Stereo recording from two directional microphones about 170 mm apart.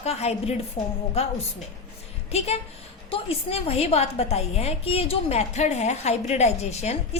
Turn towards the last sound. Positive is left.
turn(degrees=40)  # may be behind; listen again after turning